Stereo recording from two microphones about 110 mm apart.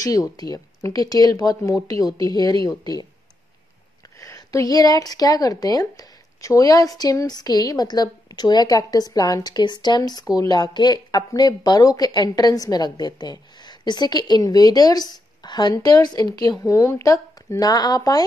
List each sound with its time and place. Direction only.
0.0 s a woman's voice: 35° left (ahead or behind)
4.2 s a woman's voice: 30° left (ahead or behind)